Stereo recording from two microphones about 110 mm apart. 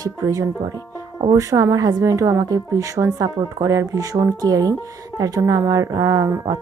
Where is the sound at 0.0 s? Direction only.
30° right (ahead or behind).